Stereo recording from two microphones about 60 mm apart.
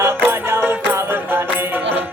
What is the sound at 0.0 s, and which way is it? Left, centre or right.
Music, right.